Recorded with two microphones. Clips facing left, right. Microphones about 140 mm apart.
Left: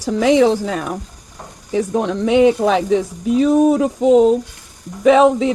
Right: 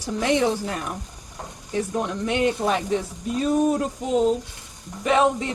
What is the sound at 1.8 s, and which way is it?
Speech, 90° left.